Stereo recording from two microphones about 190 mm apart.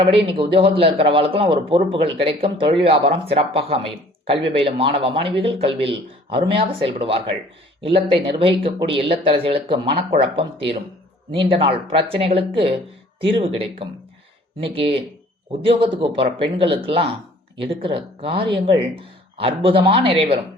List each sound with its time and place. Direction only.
0.0 s speech: 30° right (ahead or behind)